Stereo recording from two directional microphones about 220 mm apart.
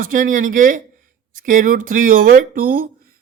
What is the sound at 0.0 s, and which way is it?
Speech, 35° right (ahead or behind).